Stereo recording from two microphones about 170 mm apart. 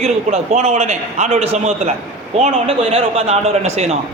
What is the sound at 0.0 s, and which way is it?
A man's voice, 40° right (ahead or behind).